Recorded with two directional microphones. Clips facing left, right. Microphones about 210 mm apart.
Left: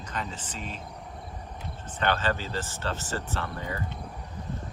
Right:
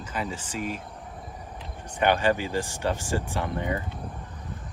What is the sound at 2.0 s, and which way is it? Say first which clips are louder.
Speech: right 5 dB; 15° right (ahead or behind).